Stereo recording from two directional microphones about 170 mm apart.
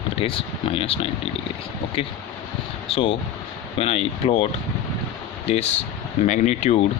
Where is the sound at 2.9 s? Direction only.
35° left (ahead or behind).